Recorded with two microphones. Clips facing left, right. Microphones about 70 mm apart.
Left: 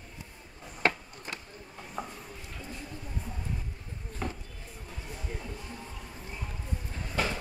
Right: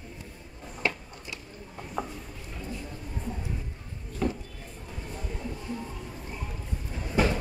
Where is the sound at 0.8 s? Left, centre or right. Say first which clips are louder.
Left 2 dB; left.